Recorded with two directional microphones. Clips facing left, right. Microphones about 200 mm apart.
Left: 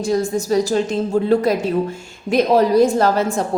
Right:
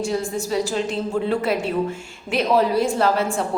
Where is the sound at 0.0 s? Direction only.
40° left (ahead or behind).